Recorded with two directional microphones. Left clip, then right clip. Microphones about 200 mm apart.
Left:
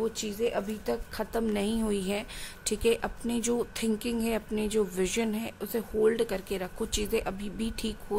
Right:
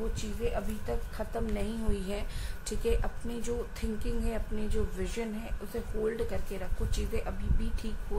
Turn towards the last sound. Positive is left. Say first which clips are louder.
# left 7 dB
turn(degrees=50)  # may be behind; listen again after turning